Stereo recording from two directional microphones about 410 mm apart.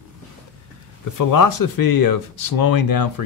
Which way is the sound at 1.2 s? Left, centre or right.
Left.